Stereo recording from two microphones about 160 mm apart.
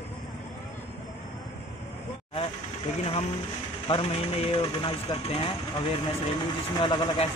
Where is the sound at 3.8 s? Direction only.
35° left (ahead or behind).